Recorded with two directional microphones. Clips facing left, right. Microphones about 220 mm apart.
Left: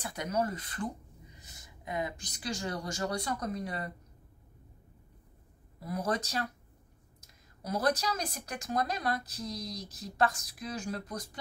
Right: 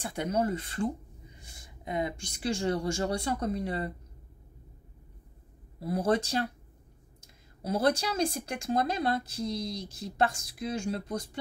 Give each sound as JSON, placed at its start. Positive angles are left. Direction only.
{"t": 0.0, "sound": "a woman's voice", "side_deg": -30}
{"t": 5.8, "sound": "a woman's voice", "side_deg": -30}
{"t": 7.6, "sound": "a woman's voice", "side_deg": -30}